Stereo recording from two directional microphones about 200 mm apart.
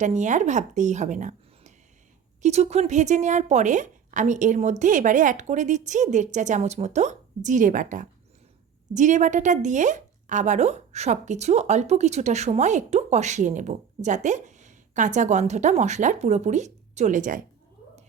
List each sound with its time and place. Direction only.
0.0 s speech: 35° right (ahead or behind)